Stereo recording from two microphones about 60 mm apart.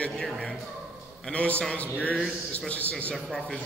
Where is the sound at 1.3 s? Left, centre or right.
Left.